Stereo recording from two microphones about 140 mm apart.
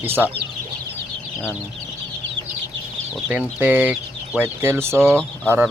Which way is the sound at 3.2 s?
10° right (ahead or behind).